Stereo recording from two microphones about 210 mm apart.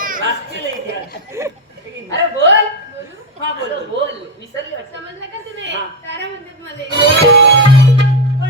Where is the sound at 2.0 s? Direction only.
60° right (ahead or behind).